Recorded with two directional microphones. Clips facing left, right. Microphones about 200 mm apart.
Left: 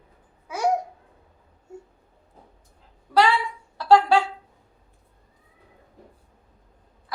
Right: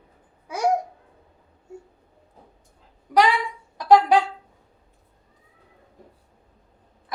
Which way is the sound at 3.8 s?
15° right (ahead or behind).